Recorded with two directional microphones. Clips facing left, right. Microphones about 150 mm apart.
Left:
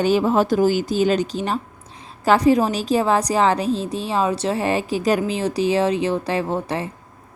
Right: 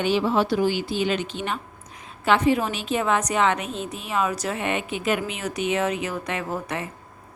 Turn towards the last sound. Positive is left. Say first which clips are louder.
# left 6 dB
turn(degrees=30)  # may be behind; listen again after turning